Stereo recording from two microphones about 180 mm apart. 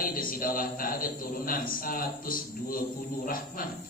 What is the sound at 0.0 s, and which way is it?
A man's voice, 50° left (ahead or behind).